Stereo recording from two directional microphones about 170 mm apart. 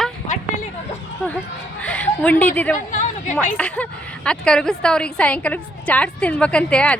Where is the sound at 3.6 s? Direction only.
5° left (ahead or behind).